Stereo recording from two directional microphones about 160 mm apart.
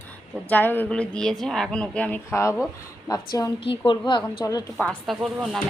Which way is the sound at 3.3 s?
30° left (ahead or behind).